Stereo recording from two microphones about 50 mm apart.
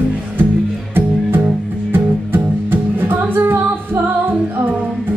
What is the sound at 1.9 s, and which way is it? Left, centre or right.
Music, right.